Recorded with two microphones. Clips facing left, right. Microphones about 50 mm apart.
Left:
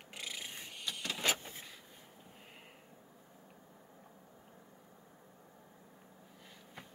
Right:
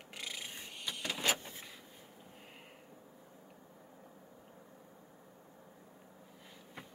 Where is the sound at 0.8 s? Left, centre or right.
Centre.